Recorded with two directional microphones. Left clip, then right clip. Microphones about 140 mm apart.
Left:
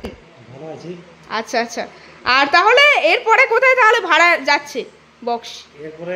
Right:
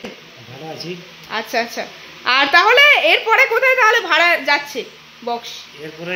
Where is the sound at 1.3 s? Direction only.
25° left (ahead or behind).